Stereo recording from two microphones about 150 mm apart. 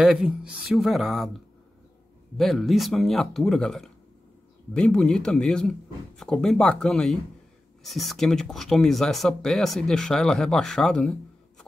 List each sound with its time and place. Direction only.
0.0 s speech: 5° right (ahead or behind)